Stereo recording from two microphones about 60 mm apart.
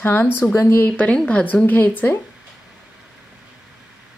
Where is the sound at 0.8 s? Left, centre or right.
Left.